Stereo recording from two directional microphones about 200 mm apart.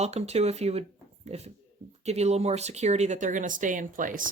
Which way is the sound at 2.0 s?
35° right (ahead or behind).